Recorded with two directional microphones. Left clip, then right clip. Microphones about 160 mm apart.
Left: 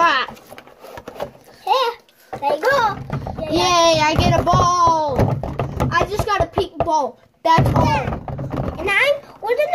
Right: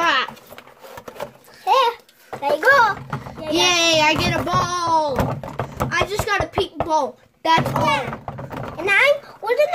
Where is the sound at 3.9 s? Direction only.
20° right (ahead or behind).